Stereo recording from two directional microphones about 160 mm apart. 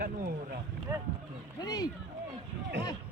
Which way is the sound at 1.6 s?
25° left (ahead or behind).